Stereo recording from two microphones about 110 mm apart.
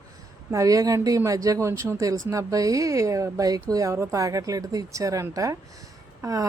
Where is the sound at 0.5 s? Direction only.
30° right (ahead or behind).